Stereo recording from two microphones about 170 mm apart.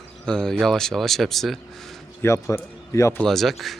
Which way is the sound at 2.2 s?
15° left (ahead or behind).